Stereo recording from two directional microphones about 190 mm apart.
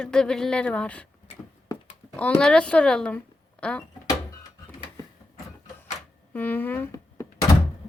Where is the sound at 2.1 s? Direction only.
5° left (ahead or behind).